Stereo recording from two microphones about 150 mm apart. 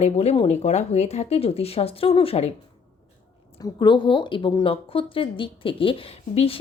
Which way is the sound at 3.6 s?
30° left (ahead or behind).